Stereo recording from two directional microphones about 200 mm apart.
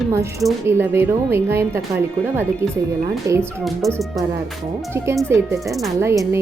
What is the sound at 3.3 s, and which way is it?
Speech, 15° right (ahead or behind).